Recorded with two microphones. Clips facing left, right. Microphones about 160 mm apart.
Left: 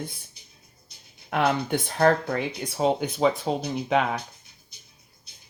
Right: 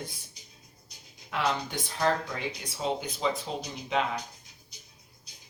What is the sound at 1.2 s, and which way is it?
Speech, 55° left (ahead or behind).